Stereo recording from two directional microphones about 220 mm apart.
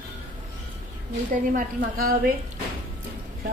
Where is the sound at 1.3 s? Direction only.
40° right (ahead or behind).